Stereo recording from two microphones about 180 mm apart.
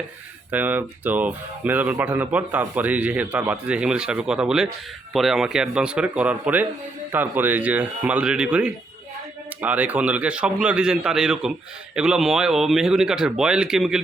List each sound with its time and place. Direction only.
0.5 s speech: 10° right (ahead or behind)